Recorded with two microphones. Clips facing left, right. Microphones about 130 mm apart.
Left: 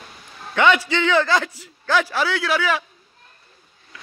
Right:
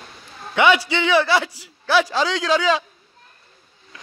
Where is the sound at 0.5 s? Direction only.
15° right (ahead or behind).